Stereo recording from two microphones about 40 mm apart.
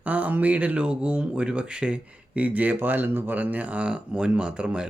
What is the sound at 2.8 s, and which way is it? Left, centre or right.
Speech, right.